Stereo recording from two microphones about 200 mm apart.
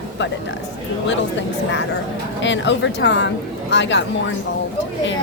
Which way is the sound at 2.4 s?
65° left (ahead or behind).